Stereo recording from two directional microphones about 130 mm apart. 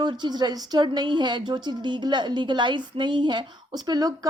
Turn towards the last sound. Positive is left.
turn(degrees=-30)  # may be behind; listen again after turning